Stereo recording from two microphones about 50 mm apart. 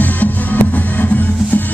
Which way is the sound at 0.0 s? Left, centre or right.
Left.